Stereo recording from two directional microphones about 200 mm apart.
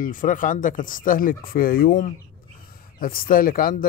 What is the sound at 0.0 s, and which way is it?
Speech, 40° left (ahead or behind).